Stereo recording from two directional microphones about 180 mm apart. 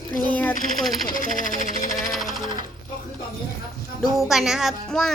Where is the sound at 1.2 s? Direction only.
45° left (ahead or behind).